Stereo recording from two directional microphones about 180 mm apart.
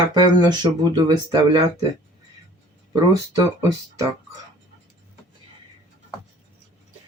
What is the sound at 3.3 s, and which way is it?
Speech, 20° right (ahead or behind).